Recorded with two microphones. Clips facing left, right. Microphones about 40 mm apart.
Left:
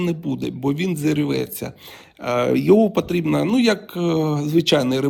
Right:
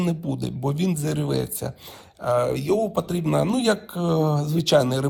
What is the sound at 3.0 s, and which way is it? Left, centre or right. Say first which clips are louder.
Speech: left 3 dB; left.